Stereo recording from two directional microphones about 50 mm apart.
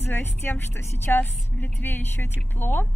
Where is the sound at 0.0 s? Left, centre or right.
Left.